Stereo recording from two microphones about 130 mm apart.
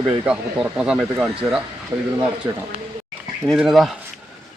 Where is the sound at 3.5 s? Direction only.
Centre (ahead or behind).